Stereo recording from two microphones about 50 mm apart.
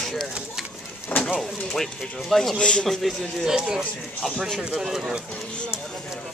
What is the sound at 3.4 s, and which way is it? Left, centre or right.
Speech, centre.